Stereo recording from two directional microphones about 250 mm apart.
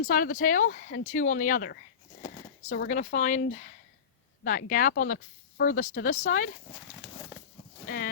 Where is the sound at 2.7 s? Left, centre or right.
Left.